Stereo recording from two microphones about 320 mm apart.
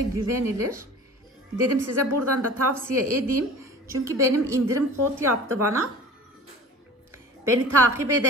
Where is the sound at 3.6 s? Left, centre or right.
Centre.